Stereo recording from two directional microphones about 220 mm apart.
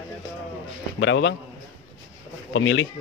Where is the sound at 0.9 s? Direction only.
55° left (ahead or behind).